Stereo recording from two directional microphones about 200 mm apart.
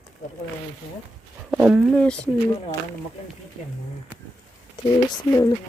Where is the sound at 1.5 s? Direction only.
5° right (ahead or behind).